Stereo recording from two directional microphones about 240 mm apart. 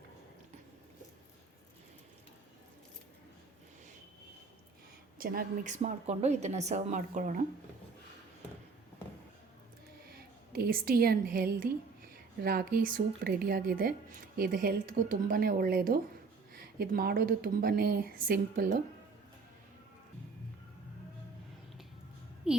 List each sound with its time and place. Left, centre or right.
5.1 s speech: right
10.5 s speech: right
22.5 s a sound: centre